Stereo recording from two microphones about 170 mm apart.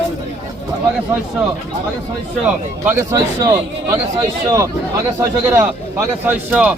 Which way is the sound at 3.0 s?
20° right (ahead or behind).